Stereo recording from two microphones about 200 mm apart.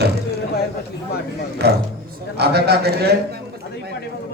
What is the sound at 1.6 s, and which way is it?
A man's voice, 55° right (ahead or behind).